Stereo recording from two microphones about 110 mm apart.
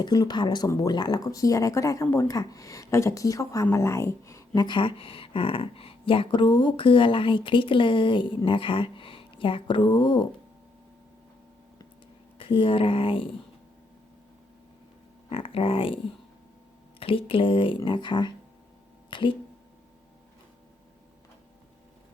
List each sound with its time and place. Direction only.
0.0 s speech: 40° left (ahead or behind)
4.6 s speech: 50° left (ahead or behind)
12.4 s speech: 55° left (ahead or behind)
15.3 s speech: 55° left (ahead or behind)
17.0 s speech: 55° left (ahead or behind)